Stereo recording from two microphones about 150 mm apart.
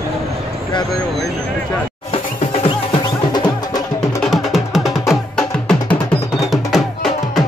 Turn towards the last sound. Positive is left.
turn(degrees=0)  # may be behind; listen again after turning